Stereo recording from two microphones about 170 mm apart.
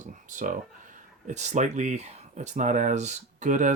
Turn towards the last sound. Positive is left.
turn(degrees=-45)  # may be behind; listen again after turning